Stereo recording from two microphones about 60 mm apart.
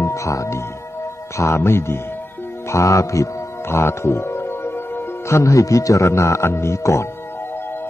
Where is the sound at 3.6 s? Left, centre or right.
Left.